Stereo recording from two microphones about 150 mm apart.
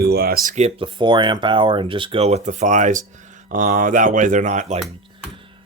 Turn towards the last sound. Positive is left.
turn(degrees=-55)  # may be behind; listen again after turning